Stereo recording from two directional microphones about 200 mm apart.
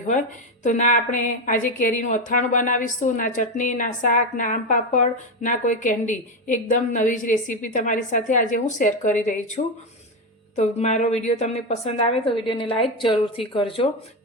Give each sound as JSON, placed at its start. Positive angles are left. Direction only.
{"t": 0.6, "sound": "a woman's voice", "side_deg": 35}